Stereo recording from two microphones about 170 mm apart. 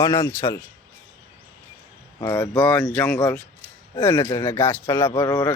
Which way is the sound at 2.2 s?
15° left (ahead or behind).